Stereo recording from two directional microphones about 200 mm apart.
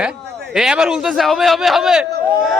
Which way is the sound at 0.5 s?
5° right (ahead or behind).